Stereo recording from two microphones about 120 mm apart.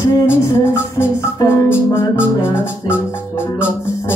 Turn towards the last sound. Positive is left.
turn(degrees=20)  # may be behind; listen again after turning